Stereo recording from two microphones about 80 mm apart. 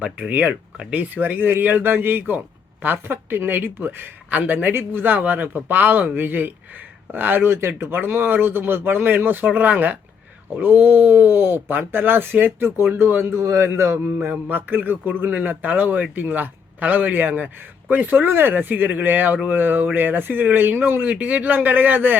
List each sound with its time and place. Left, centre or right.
0.0 s speech: centre
13.4 s a man's voice: right
14.3 s speech: right